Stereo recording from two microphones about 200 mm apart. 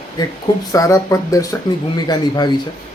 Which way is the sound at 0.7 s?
15° left (ahead or behind).